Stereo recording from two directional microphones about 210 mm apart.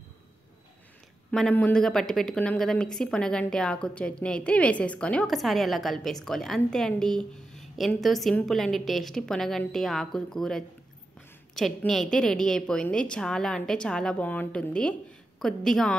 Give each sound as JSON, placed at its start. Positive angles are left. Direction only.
{"t": 1.3, "sound": "a woman's voice", "side_deg": 5}